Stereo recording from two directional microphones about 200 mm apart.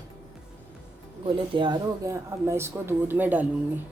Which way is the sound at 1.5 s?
25° right (ahead or behind).